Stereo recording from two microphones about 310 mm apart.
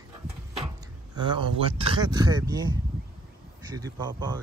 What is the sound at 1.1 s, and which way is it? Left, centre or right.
Speech, centre.